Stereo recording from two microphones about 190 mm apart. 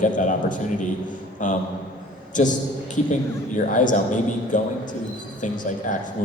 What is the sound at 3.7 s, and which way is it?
Speech, 40° left (ahead or behind).